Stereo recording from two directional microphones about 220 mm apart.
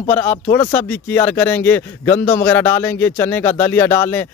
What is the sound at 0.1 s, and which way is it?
Speech, 10° left (ahead or behind).